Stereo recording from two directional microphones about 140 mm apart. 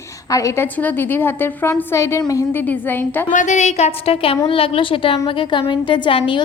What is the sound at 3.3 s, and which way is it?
A woman's voice, 60° left (ahead or behind).